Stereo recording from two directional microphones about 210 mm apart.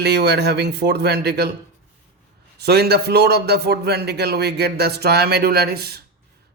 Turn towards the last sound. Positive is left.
turn(degrees=-50)  # may be behind; listen again after turning